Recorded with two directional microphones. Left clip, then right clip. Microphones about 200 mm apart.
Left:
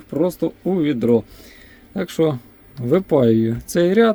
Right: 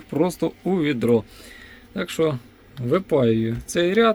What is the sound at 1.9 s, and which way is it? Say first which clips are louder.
Speech: left 3 dB; 25° left (ahead or behind).